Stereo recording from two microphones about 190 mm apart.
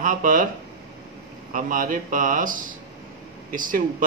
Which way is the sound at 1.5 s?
45° right (ahead or behind).